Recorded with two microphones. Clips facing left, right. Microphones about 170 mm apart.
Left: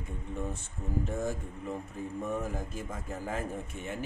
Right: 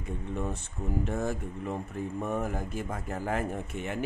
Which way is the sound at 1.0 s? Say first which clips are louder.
Right 2 dB; 70° right (ahead or behind).